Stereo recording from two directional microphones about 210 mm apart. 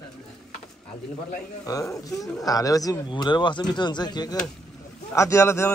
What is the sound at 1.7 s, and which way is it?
Speech, 15° left (ahead or behind).